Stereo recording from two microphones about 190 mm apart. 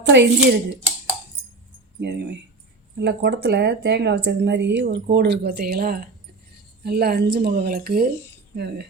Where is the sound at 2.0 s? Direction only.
60° right (ahead or behind).